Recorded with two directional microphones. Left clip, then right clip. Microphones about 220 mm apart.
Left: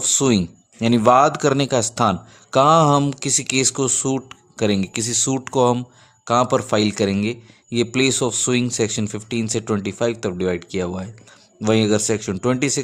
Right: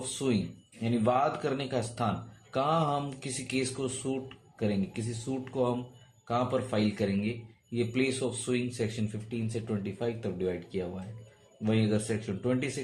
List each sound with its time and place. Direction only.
0.8 s a man's voice: 50° left (ahead or behind)